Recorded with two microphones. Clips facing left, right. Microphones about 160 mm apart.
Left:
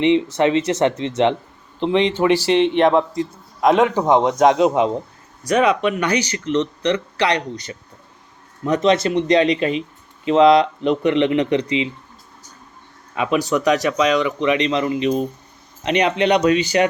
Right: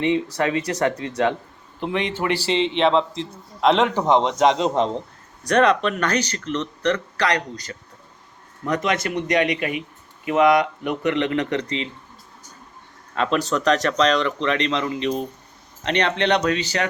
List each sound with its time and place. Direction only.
0.0 s speech: 20° left (ahead or behind)
13.1 s speech: 10° left (ahead or behind)